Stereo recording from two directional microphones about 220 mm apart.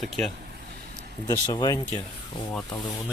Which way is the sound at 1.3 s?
15° left (ahead or behind).